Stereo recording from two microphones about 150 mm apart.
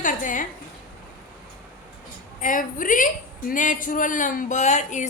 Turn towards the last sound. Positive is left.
turn(degrees=55)  # may be behind; listen again after turning